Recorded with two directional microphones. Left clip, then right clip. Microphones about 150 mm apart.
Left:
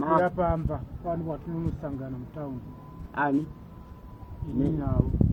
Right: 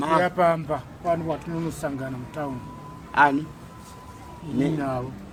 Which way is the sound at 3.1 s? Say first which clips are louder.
Right 9 dB; 25° right (ahead or behind).